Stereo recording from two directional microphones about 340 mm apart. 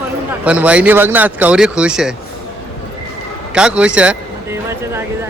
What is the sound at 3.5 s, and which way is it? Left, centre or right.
Speech, centre.